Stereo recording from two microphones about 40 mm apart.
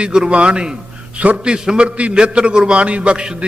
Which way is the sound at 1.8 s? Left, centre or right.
Right.